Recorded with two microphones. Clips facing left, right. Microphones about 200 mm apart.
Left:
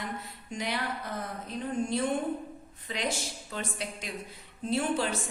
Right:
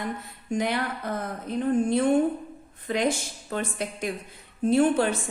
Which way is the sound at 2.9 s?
55° right (ahead or behind).